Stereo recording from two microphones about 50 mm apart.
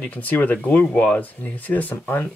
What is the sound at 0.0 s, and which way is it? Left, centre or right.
Speech, left.